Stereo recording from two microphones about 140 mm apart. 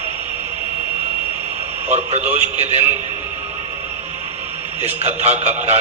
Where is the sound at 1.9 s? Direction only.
50° right (ahead or behind).